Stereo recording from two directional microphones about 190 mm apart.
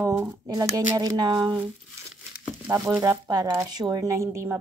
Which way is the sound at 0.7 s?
20° right (ahead or behind).